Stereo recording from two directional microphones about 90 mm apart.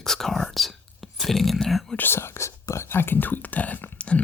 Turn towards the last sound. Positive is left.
turn(degrees=15)  # may be behind; listen again after turning